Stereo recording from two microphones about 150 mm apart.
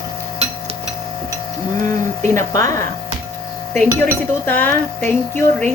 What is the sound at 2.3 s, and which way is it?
Speech, 20° left (ahead or behind).